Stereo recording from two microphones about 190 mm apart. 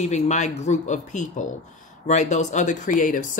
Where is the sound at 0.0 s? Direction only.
40° left (ahead or behind).